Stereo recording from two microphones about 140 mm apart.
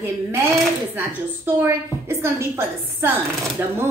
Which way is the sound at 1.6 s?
15° right (ahead or behind).